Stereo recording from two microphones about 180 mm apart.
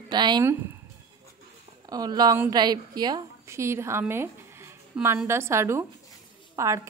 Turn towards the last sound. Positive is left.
turn(degrees=-15)  # may be behind; listen again after turning